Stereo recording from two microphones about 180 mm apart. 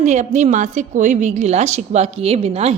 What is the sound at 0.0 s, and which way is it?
A woman's voice, 40° right (ahead or behind).